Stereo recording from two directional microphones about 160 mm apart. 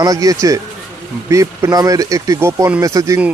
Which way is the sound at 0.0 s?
20° right (ahead or behind).